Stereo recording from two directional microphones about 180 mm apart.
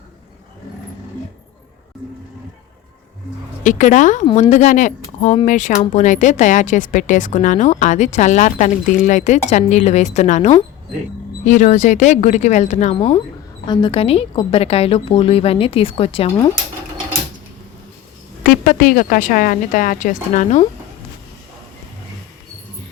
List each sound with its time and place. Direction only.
3.6 s a woman's voice: 45° left (ahead or behind)
18.4 s a woman's voice: 50° left (ahead or behind)